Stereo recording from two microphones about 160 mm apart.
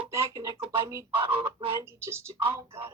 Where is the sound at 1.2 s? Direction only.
35° right (ahead or behind).